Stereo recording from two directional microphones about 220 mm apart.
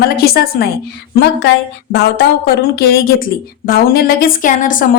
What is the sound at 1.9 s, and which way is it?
Speech, 45° left (ahead or behind).